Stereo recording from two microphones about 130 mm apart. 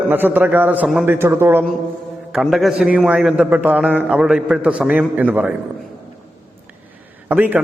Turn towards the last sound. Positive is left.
turn(degrees=-15)  # may be behind; listen again after turning